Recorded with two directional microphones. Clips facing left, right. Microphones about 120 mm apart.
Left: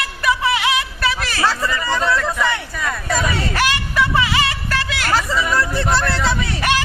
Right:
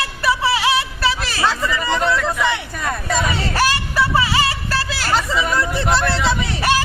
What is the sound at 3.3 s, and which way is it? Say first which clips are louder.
Music: right 1 dB; 30° right (ahead or behind).